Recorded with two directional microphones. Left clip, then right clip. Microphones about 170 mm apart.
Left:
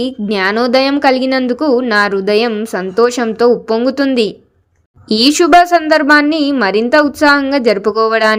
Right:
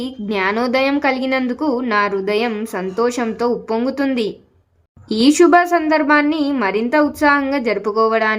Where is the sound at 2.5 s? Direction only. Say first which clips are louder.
Left 5 dB; 10° left (ahead or behind).